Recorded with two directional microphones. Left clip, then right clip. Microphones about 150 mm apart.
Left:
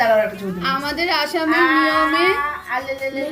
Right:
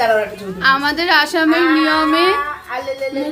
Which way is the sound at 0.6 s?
50° right (ahead or behind).